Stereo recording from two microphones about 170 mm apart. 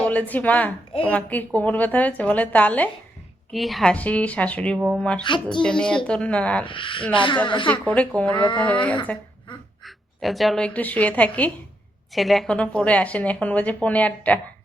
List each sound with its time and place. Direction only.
0.0 s a woman's voice: 10° left (ahead or behind)
5.2 s a woman's voice: 30° left (ahead or behind)
5.6 s a woman's voice: 5° left (ahead or behind)
6.7 s a woman's voice: 30° left (ahead or behind)
7.7 s a woman's voice: 10° left (ahead or behind)